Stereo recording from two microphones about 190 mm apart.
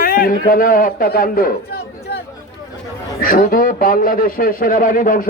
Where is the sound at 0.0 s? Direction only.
50° left (ahead or behind).